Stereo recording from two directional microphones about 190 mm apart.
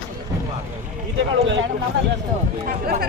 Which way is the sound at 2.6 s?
50° right (ahead or behind).